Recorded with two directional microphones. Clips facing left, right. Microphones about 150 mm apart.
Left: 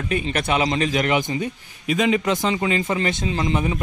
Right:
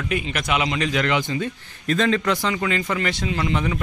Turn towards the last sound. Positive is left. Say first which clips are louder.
# left 1 dB
turn(degrees=20)  # may be behind; listen again after turning